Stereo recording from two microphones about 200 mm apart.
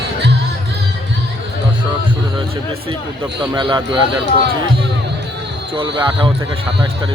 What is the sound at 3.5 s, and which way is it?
Speech, 25° right (ahead or behind).